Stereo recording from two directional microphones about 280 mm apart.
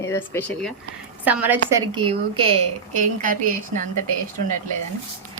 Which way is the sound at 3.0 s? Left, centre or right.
Right.